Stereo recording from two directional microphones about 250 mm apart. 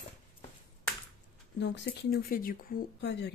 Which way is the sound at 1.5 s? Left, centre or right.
Left.